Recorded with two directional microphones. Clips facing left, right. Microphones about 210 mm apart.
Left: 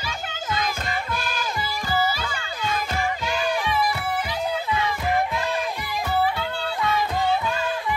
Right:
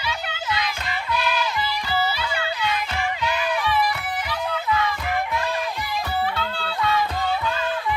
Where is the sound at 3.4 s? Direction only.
25° left (ahead or behind).